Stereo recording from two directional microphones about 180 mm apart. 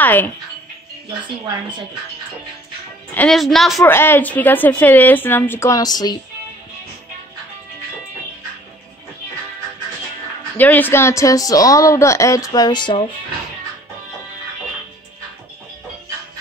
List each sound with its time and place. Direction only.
0.0 s speech: 10° left (ahead or behind)
3.2 s a woman's voice: centre (ahead or behind)
3.8 s a woman's voice: 10° left (ahead or behind)
10.6 s a woman's voice: 10° left (ahead or behind)